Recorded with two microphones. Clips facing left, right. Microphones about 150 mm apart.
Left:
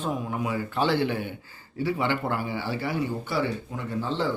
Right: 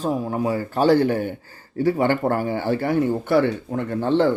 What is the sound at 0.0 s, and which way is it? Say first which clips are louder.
A man's voice: right 6 dB; 35° right (ahead or behind).